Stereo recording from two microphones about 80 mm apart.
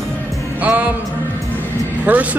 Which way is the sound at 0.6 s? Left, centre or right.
Centre.